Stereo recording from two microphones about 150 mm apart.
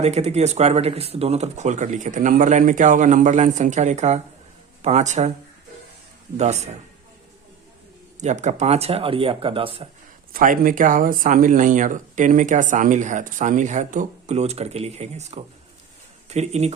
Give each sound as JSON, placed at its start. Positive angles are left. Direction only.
{"t": 0.0, "sound": "speech", "side_deg": -45}
{"t": 6.3, "sound": "speech", "side_deg": -50}
{"t": 8.2, "sound": "speech", "side_deg": -50}
{"t": 10.3, "sound": "speech", "side_deg": -70}